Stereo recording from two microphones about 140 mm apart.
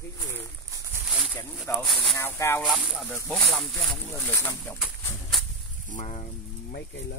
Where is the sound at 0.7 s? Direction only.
25° right (ahead or behind).